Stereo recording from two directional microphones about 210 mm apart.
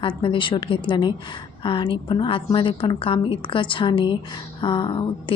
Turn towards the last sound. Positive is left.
turn(degrees=20)  # may be behind; listen again after turning